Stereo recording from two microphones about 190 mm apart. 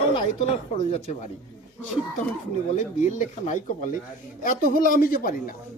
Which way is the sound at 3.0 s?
40° left (ahead or behind).